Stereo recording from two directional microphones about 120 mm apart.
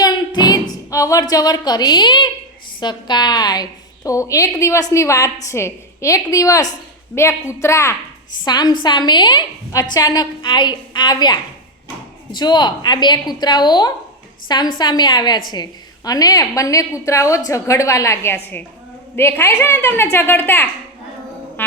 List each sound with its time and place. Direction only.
0.0 s a sound: 35° left (ahead or behind)
2.8 s a woman's voice: 35° left (ahead or behind)
8.4 s a woman's voice: 35° left (ahead or behind); by 20.7 s 15° left (ahead or behind)